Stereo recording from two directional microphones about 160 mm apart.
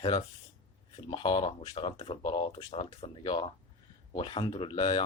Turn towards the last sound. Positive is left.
turn(degrees=30)  # may be behind; listen again after turning